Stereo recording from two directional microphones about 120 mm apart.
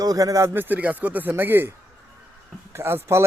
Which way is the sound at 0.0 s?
30° right (ahead or behind).